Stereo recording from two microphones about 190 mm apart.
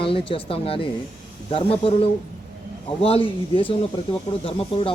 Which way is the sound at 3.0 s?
30° left (ahead or behind).